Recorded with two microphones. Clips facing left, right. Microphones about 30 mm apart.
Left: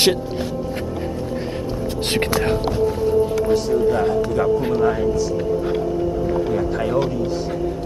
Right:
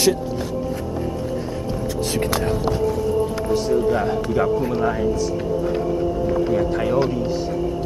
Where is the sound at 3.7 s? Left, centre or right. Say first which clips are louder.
Left 1 dB; centre.